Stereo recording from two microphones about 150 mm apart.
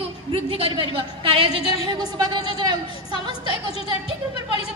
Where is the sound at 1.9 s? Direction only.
30° right (ahead or behind).